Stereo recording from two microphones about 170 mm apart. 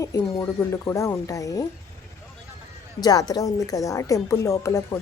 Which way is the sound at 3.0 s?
20° left (ahead or behind).